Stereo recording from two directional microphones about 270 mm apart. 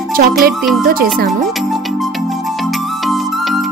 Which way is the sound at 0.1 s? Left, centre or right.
Right.